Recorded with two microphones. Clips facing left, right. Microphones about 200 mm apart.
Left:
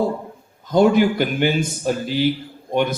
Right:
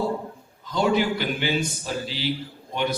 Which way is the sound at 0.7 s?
50° left (ahead or behind).